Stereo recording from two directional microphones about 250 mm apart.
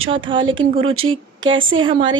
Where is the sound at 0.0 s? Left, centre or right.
Right.